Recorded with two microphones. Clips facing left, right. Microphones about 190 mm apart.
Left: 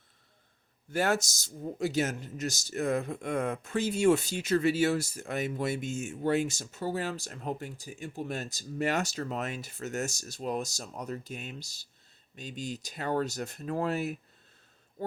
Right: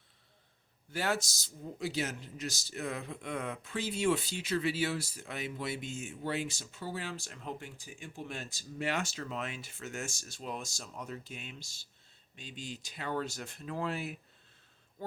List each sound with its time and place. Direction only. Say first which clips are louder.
0.9 s speech: left 5 dB; 45° left (ahead or behind)